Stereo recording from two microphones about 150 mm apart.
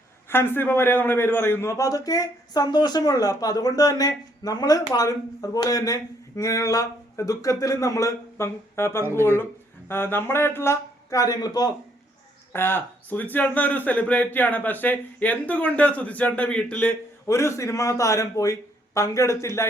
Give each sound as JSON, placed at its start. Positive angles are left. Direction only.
{"t": 0.3, "sound": "a man's voice", "side_deg": 15}
{"t": 12.5, "sound": "a man's voice", "side_deg": 15}